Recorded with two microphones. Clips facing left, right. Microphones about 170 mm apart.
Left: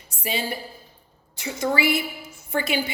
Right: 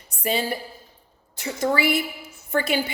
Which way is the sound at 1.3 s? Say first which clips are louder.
Right 1 dB; 55° right (ahead or behind).